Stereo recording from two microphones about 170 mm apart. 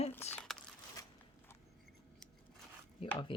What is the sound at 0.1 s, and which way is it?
Crumpling, 10° left (ahead or behind).